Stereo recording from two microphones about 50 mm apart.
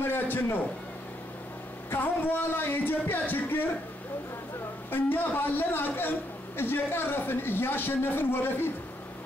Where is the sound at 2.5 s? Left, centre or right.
Left.